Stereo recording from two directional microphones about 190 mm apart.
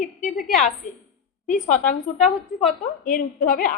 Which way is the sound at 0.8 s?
40° left (ahead or behind).